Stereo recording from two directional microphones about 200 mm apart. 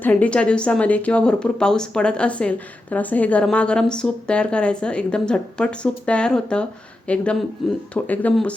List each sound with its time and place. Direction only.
0.0 s a woman's voice: 5° left (ahead or behind)